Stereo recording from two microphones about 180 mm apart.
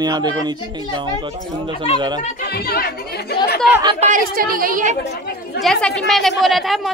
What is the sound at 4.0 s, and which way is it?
A woman's voice, 45° right (ahead or behind).